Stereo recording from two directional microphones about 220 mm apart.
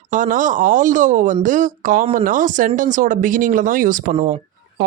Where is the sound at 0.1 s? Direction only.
35° right (ahead or behind).